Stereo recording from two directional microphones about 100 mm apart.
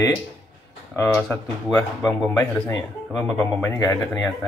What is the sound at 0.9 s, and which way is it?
Speech, 15° left (ahead or behind).